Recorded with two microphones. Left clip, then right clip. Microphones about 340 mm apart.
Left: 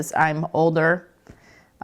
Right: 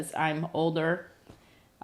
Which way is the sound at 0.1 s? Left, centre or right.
Left.